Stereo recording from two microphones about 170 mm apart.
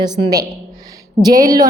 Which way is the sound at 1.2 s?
20° right (ahead or behind).